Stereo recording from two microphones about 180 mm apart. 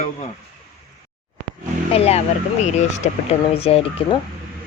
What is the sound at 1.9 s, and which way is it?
Speech, 35° left (ahead or behind).